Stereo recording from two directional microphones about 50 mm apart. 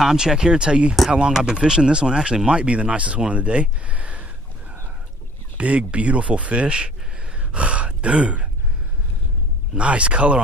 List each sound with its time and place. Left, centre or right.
0.0 s speech: centre; by 4.3 s right
5.6 s speech: right
7.3 s gasp: right
9.8 s speech: right